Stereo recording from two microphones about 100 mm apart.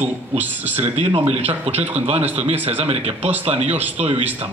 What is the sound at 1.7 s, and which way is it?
Speech, 15° right (ahead or behind).